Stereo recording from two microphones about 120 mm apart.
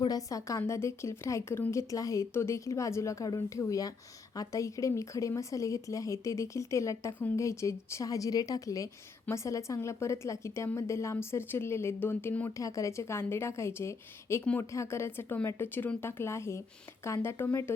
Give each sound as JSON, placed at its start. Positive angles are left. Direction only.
{"t": 0.0, "sound": "a woman's voice", "side_deg": 30}
{"t": 12.5, "sound": "a woman's voice", "side_deg": 25}